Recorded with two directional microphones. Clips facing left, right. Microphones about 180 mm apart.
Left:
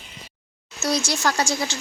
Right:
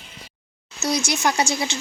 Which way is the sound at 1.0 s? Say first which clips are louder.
Right 1 dB; 20° right (ahead or behind).